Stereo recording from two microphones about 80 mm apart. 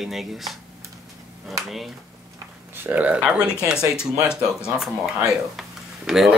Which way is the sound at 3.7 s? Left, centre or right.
Left.